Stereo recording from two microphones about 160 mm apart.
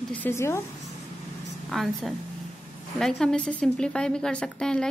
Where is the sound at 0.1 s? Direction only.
15° left (ahead or behind).